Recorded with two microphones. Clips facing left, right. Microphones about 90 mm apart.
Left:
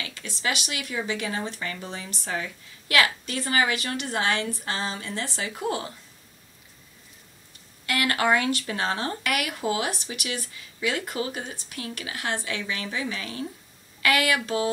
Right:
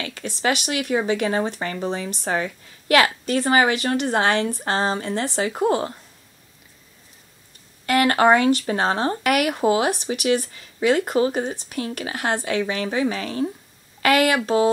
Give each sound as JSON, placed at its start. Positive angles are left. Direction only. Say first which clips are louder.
{"t": 0.0, "sound": "speech", "louder": "right 7 dB", "side_deg": -50}
{"t": 7.8, "sound": "speech", "louder": "right 8 dB", "side_deg": -40}
{"t": 9.2, "sound": "speech", "louder": "right 8 dB", "side_deg": -50}
{"t": 14.4, "sound": "a sound", "louder": "right 8 dB", "side_deg": -30}